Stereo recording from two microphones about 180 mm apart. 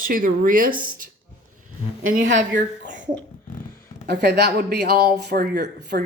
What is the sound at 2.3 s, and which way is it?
Speech, 45° right (ahead or behind).